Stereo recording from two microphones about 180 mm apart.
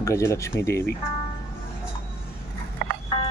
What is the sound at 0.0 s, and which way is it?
Speech, 15° left (ahead or behind).